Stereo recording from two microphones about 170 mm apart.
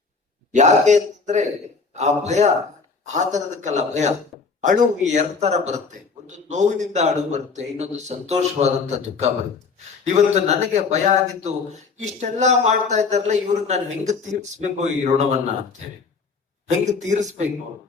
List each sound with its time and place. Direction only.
0.5 s a man's voice: 45° right (ahead or behind)
17.1 s speech: 45° right (ahead or behind)